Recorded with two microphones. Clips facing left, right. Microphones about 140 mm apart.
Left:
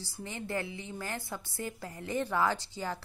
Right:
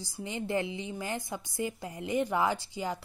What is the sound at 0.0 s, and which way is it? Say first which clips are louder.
A woman's voice: right 4 dB; 15° right (ahead or behind).